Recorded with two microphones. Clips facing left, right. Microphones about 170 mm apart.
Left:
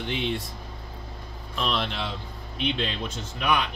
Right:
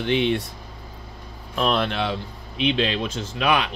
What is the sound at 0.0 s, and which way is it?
Speech, 70° right (ahead or behind).